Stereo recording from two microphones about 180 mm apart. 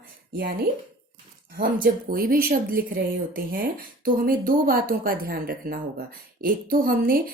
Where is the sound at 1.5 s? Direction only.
55° right (ahead or behind).